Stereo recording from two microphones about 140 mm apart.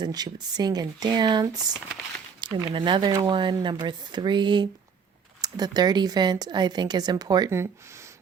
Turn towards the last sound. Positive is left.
turn(degrees=-25)  # may be behind; listen again after turning